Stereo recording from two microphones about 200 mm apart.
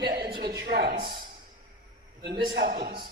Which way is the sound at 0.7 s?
50° right (ahead or behind).